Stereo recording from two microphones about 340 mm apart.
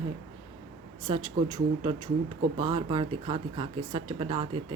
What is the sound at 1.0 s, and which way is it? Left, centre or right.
Speech, centre.